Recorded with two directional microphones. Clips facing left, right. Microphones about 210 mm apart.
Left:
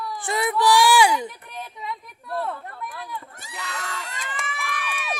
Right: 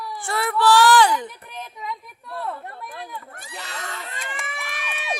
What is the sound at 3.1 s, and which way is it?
Run, 55° right (ahead or behind).